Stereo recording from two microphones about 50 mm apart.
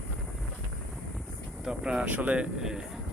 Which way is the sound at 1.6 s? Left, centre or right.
Centre.